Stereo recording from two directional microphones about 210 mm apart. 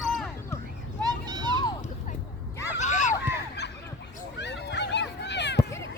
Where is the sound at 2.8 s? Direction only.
35° left (ahead or behind).